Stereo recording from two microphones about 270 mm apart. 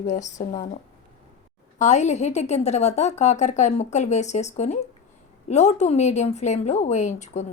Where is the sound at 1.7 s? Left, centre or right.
Left.